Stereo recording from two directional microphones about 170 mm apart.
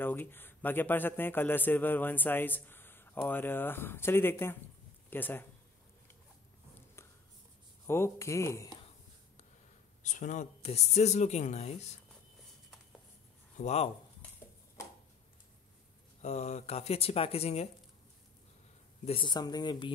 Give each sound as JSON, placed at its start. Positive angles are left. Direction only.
{"t": 0.0, "sound": "a man's voice", "side_deg": 10}
{"t": 7.8, "sound": "a man's voice", "side_deg": 15}
{"t": 10.0, "sound": "speech", "side_deg": 45}
{"t": 13.6, "sound": "speech", "side_deg": 40}
{"t": 16.2, "sound": "speech", "side_deg": 40}
{"t": 19.0, "sound": "speech", "side_deg": 30}